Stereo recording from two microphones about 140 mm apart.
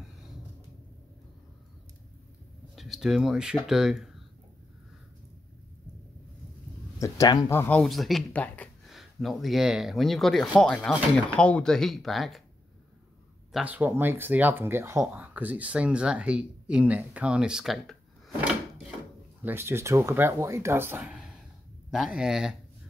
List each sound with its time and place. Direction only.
2.7 s speech: centre (ahead or behind)
7.0 s speech: 25° left (ahead or behind)
7.8 s speech: centre (ahead or behind)
8.8 s speech: centre (ahead or behind)
13.5 s speech: 5° right (ahead or behind)
19.4 s speech: 15° right (ahead or behind)
21.1 s a sound: 5° right (ahead or behind)
21.9 s speech: 5° right (ahead or behind)